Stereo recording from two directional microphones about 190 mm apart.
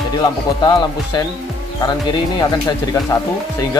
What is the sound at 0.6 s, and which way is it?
Speech, 20° left (ahead or behind).